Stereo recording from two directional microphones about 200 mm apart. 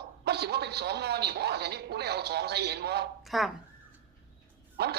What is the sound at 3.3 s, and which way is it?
Speech, centre (ahead or behind).